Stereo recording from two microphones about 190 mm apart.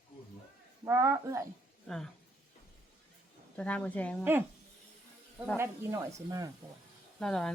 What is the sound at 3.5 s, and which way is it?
Speech, 5° left (ahead or behind).